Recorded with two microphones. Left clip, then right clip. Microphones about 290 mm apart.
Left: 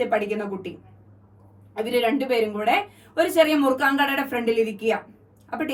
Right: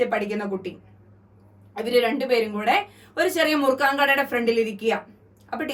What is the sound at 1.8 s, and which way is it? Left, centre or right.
A woman's voice, centre.